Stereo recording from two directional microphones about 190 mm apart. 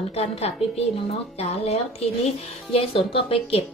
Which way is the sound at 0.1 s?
35° left (ahead or behind).